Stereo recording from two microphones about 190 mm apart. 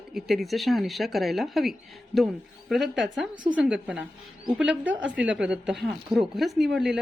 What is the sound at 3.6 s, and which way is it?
A woman's voice, 5° right (ahead or behind).